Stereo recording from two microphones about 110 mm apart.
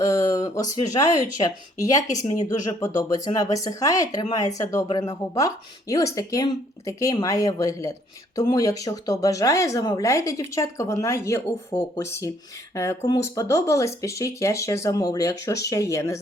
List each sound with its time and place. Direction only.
0.0 s speech: 35° left (ahead or behind)
5.9 s speech: 30° left (ahead or behind)